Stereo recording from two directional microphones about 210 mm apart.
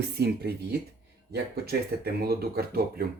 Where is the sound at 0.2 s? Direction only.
50° right (ahead or behind).